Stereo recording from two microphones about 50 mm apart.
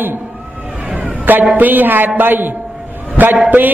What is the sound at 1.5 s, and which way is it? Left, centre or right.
A man's voice, right.